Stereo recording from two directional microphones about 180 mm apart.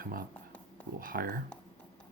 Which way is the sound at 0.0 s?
55° right (ahead or behind).